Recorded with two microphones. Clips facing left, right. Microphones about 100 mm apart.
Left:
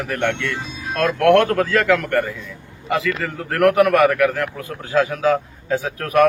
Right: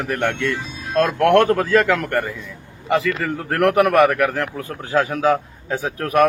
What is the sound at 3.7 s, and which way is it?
A man's voice, 30° right (ahead or behind).